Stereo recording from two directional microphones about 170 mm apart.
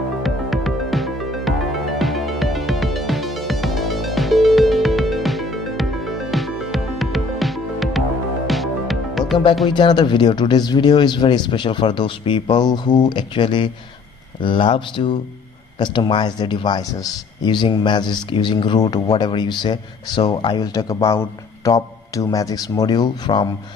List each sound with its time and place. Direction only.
0.2 s music: centre (ahead or behind)
9.7 s speech: 25° left (ahead or behind)